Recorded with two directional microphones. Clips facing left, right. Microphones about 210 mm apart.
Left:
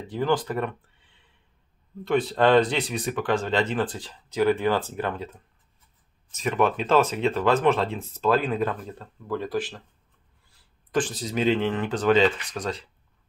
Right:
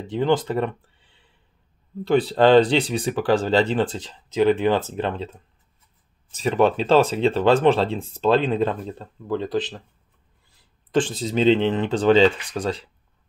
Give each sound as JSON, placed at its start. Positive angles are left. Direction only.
{"t": 0.0, "sound": "speech", "side_deg": -25}
{"t": 2.0, "sound": "speech", "side_deg": -30}
{"t": 10.9, "sound": "speech", "side_deg": -25}